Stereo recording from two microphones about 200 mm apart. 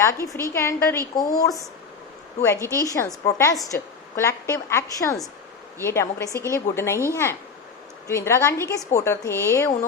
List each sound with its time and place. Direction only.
0.0 s a woman's voice: 15° left (ahead or behind)